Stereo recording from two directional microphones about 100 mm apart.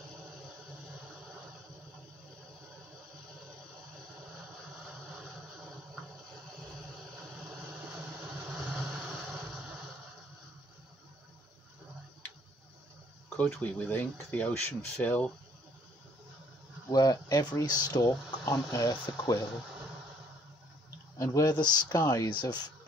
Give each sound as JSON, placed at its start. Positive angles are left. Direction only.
{"t": 8.5, "sound": "vehicle", "side_deg": 0}
{"t": 13.4, "sound": "speech", "side_deg": 15}
{"t": 16.9, "sound": "speech", "side_deg": 40}
{"t": 21.2, "sound": "speech", "side_deg": 30}
{"t": 21.5, "sound": "speech", "side_deg": 45}
{"t": 22.0, "sound": "speech", "side_deg": 35}
{"t": 22.3, "sound": "speech", "side_deg": 50}